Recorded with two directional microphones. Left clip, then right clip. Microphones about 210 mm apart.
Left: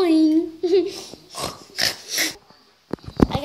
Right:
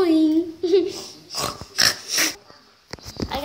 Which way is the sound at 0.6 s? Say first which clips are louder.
Even; 20° left (ahead or behind).